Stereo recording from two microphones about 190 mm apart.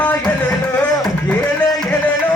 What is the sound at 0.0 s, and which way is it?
Music, 5° left (ahead or behind).